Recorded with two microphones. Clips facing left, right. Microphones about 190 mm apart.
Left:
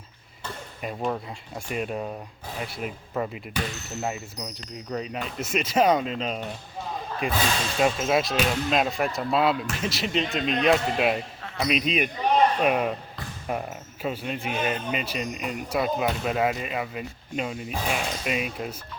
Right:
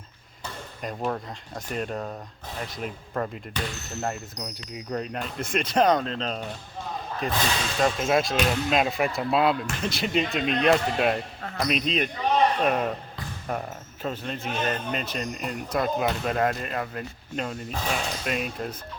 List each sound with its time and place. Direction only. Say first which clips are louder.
0.8 s speech: left 1 dB; 5° left (ahead or behind)